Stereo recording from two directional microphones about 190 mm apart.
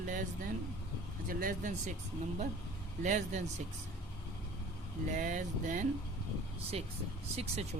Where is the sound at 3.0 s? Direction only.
40° right (ahead or behind).